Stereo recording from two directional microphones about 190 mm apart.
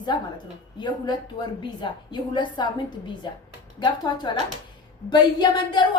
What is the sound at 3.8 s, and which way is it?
A woman's voice, 20° left (ahead or behind).